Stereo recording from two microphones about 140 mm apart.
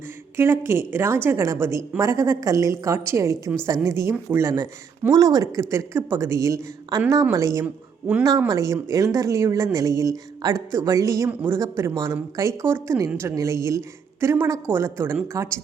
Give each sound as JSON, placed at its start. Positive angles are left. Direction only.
{"t": 0.3, "sound": "a woman's voice", "side_deg": -20}
{"t": 7.6, "sound": "speech", "side_deg": -10}
{"t": 8.2, "sound": "speech", "side_deg": -25}